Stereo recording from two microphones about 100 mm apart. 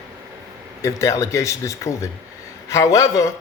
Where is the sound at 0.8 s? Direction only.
30° left (ahead or behind).